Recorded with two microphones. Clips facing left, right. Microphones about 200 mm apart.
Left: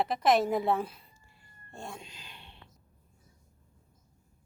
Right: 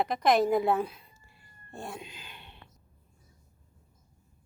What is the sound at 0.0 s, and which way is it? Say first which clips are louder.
A woman's voice: right 1 dB; centre (ahead or behind).